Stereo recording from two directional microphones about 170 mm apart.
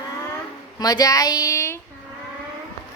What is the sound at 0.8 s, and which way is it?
A woman's voice, 20° left (ahead or behind).